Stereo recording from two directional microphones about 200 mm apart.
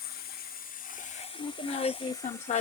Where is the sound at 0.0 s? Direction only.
50° left (ahead or behind); by 2.1 s 25° left (ahead or behind).